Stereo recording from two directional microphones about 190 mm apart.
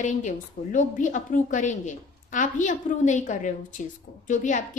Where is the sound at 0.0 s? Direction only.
40° left (ahead or behind).